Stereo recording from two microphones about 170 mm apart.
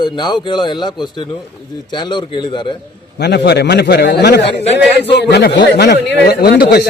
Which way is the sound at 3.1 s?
75° left (ahead or behind).